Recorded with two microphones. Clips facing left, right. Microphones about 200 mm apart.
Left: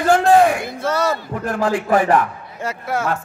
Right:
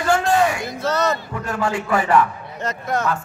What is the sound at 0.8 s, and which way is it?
Speech, 10° left (ahead or behind).